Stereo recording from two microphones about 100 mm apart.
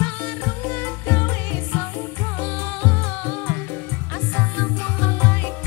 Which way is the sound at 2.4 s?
25° left (ahead or behind).